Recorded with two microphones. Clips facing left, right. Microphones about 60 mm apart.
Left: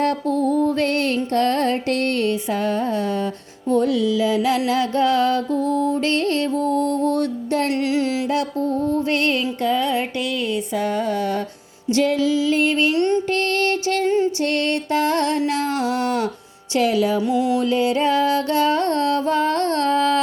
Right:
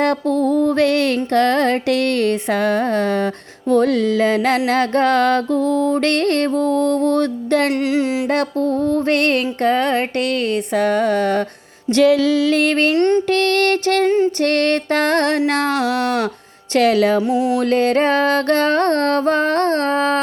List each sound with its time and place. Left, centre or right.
0.0 s music: right
5.6 s music: centre
5.9 s music: right
7.7 s music: right
8.3 s music: right
11.9 s music: right
12.9 s music: right
13.3 s music: right
14.4 s music: right
17.2 s music: right
17.6 s music: right